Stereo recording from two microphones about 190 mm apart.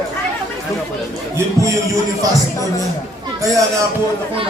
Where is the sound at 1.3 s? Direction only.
15° right (ahead or behind).